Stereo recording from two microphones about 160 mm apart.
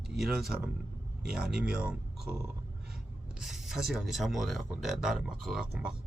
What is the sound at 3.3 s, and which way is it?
Speech, centre (ahead or behind).